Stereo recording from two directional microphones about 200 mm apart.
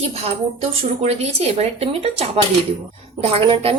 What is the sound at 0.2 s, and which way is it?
A woman's voice, 30° right (ahead or behind).